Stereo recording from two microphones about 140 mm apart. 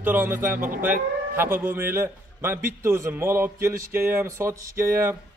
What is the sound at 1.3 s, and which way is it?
A man's voice, 15° right (ahead or behind).